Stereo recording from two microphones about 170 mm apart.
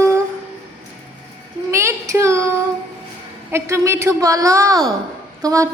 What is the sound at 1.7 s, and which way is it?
Child singing, 15° right (ahead or behind).